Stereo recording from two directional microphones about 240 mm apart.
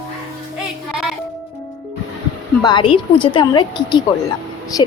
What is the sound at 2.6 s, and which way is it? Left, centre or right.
A woman's voice, centre.